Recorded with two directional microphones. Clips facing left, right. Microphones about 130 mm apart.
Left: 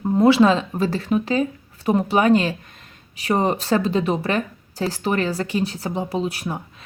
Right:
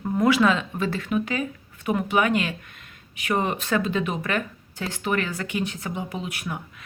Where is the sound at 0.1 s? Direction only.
30° left (ahead or behind).